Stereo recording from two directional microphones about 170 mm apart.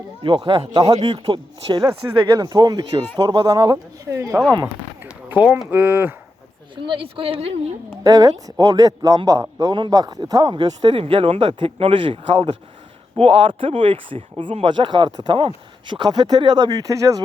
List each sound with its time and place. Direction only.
0.2 s a man's voice: 30° right (ahead or behind); by 6.1 s 15° right (ahead or behind)
6.7 s speech: 30° right (ahead or behind)
8.0 s a man's voice: 20° right (ahead or behind)